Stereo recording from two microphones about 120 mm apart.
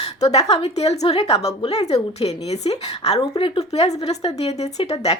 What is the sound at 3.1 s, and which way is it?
Speech, 45° left (ahead or behind).